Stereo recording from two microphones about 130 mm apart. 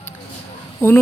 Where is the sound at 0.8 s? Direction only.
20° left (ahead or behind).